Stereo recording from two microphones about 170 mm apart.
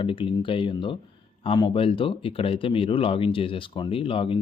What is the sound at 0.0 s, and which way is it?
A man's voice, 30° left (ahead or behind).